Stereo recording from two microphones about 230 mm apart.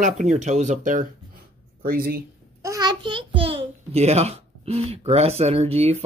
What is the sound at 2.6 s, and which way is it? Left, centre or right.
A child's voice, centre.